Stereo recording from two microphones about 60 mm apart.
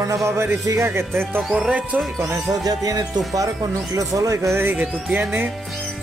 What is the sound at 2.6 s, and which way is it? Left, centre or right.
Music, right.